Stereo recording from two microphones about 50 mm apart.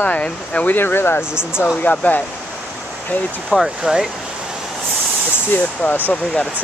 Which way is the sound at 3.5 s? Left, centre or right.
Centre.